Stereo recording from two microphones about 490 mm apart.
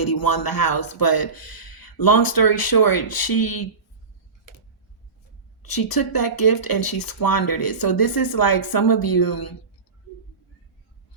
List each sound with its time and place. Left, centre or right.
0.0 s speech: left
5.6 s speech: left